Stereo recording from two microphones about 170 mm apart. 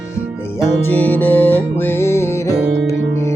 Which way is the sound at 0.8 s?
10° left (ahead or behind).